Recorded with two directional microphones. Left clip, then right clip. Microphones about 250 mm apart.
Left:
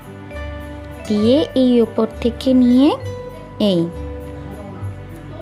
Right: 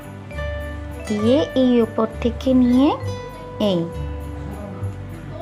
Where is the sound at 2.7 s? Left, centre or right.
Left.